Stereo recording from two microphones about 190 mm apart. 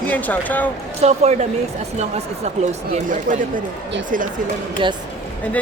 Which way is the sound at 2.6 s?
40° right (ahead or behind).